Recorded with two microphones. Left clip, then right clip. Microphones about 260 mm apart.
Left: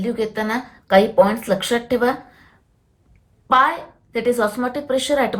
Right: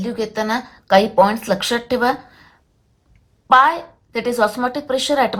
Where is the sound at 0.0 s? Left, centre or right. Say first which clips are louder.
Even; centre.